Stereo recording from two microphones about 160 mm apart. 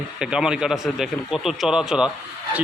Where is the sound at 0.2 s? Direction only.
5° right (ahead or behind).